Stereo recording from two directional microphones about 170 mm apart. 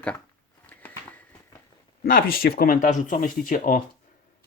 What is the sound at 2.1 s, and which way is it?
Speech, 55° left (ahead or behind).